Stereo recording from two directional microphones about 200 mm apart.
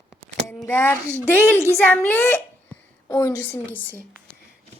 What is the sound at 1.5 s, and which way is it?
Speech, 15° right (ahead or behind).